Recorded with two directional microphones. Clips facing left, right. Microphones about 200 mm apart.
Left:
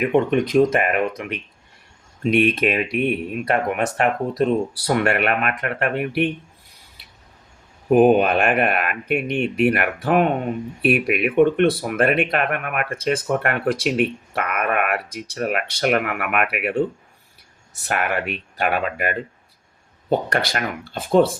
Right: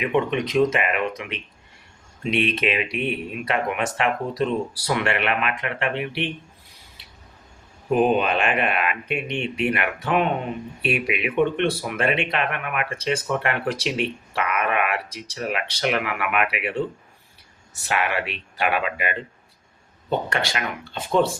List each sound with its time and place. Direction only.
0.0 s speech: 45° left (ahead or behind)
7.9 s speech: 50° left (ahead or behind)
17.8 s speech: 45° left (ahead or behind)